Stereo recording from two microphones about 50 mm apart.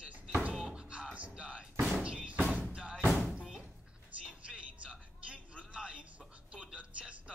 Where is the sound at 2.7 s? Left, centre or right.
Centre.